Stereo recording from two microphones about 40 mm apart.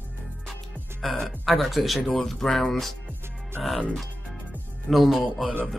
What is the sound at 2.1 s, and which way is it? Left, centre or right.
Speech, centre.